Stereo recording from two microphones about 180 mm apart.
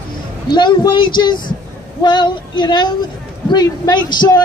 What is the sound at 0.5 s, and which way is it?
A man's voice, 25° left (ahead or behind).